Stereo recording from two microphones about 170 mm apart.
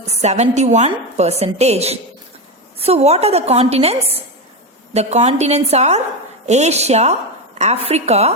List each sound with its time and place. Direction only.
0.1 s a woman's voice: 40° right (ahead or behind)